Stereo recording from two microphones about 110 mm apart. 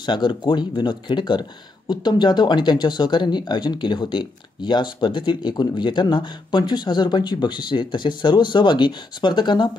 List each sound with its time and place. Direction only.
0.0 s speech: 45° left (ahead or behind)